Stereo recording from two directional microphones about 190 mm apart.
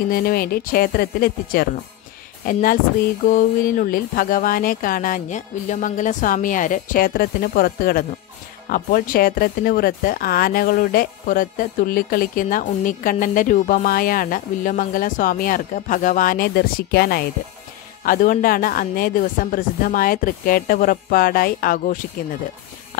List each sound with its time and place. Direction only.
0.1 s speech: 50° left (ahead or behind)